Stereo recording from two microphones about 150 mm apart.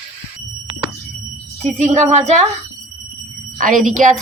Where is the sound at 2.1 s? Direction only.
50° right (ahead or behind).